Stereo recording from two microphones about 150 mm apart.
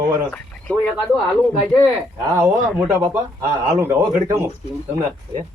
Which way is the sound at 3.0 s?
20° right (ahead or behind).